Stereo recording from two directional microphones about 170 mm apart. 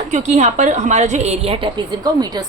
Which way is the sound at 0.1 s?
40° right (ahead or behind).